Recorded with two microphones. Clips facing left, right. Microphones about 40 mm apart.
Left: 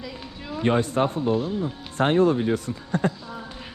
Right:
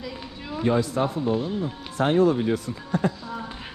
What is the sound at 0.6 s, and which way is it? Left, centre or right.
A man's voice, left.